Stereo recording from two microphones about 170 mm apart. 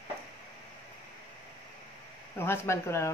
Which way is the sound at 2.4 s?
15° left (ahead or behind).